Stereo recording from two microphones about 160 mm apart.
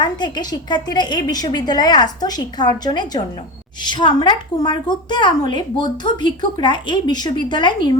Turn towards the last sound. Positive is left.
turn(degrees=30)  # may be behind; listen again after turning